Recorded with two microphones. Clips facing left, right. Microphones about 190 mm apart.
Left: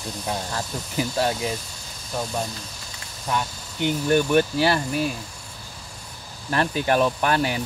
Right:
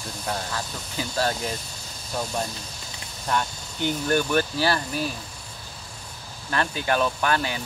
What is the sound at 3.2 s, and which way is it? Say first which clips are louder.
Speech: even; 10° left (ahead or behind).